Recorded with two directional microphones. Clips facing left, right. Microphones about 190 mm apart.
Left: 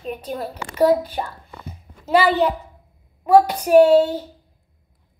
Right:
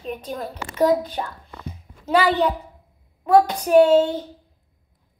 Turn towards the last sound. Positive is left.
turn(degrees=10)  # may be behind; listen again after turning